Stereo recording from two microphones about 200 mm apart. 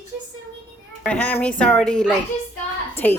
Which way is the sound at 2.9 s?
10° left (ahead or behind).